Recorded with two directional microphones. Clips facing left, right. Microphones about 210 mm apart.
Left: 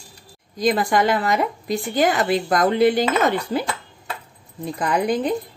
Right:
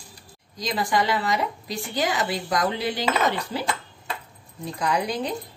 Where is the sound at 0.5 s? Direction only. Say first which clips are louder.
Left 6 dB; 50° left (ahead or behind).